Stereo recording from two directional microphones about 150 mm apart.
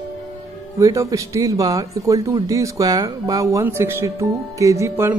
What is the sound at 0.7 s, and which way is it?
Speech, 20° right (ahead or behind).